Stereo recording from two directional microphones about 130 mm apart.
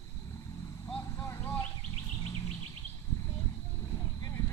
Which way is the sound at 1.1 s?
25° left (ahead or behind).